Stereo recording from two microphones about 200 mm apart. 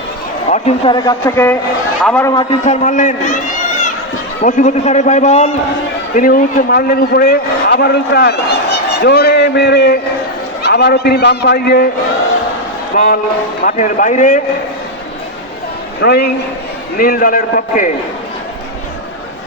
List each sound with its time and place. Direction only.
0.5 s a man's voice: 30° left (ahead or behind)
0.9 s speech: 15° left (ahead or behind)
2.6 s a man's voice: 40° left (ahead or behind)
4.4 s a man's voice: 35° left (ahead or behind); by 11.9 s 50° left (ahead or behind)
12.9 s a man's voice: 40° left (ahead or behind)
16.0 s a man's voice: 55° left (ahead or behind)